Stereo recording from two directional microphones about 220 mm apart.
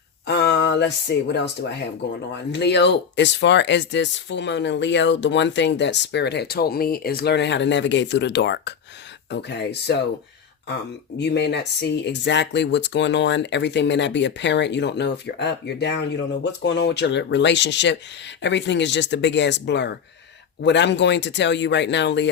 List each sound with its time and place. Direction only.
0.3 s a sound: 50° left (ahead or behind)
1.1 s speech: 50° left (ahead or behind)
2.5 s speech: 50° left (ahead or behind)
11.2 s speech: 50° left (ahead or behind)